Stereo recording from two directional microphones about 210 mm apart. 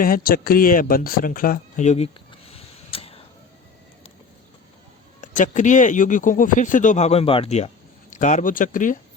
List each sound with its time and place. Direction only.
0.0 s speech: 45° left (ahead or behind)
2.5 s a sound: 30° left (ahead or behind)
5.2 s speech: 35° left (ahead or behind)